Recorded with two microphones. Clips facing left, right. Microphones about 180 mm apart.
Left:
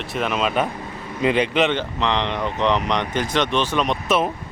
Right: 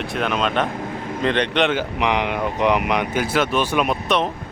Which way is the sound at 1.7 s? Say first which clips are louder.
Right 2 dB; 10° right (ahead or behind).